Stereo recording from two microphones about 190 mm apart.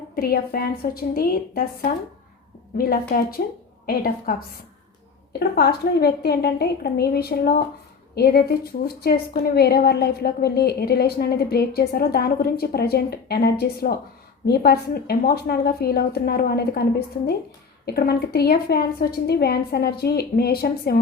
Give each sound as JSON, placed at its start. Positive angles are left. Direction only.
{"t": 0.2, "sound": "a woman's voice", "side_deg": 50}
{"t": 5.4, "sound": "a woman's voice", "side_deg": 55}
{"t": 17.8, "sound": "a woman's voice", "side_deg": 55}